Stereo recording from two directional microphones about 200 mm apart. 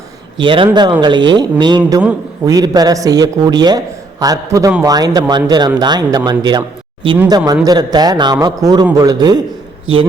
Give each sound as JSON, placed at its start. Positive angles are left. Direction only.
{"t": 0.3, "sound": "a man's voice", "side_deg": -25}